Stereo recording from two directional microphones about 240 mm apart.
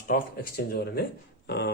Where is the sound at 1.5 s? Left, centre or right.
Left.